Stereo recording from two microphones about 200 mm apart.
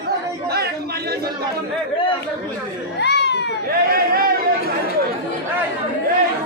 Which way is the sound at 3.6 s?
50° right (ahead or behind).